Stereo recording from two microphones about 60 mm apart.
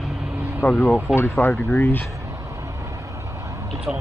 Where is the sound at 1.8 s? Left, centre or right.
Left.